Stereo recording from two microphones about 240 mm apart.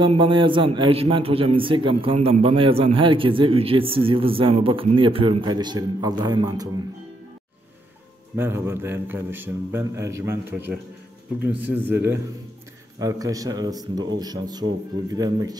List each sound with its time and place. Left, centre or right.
0.0 s a man's voice: right
8.4 s a man's voice: centre